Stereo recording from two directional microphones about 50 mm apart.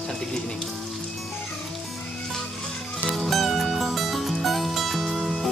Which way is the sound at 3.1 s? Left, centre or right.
Centre.